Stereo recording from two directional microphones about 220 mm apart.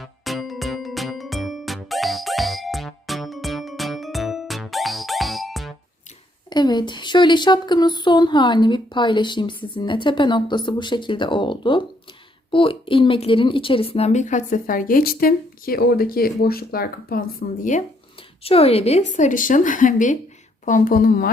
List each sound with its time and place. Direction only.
0.0 s music: centre (ahead or behind)
6.5 s a woman's voice: 20° left (ahead or behind); by 21.2 s 40° left (ahead or behind)